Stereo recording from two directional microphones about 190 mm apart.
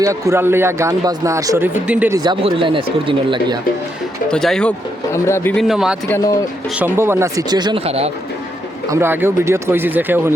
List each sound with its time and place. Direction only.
0.0 s speech: 15° right (ahead or behind)
2.1 s speech: 25° right (ahead or behind)
4.3 s speech: 5° left (ahead or behind)
5.1 s speech: 15° left (ahead or behind)
5.6 s speech: 5° right (ahead or behind)
6.1 s speech: 15° left (ahead or behind)
6.7 s speech: 10° right (ahead or behind); by 8.1 s 30° right (ahead or behind)
8.9 s speech: 10° right (ahead or behind)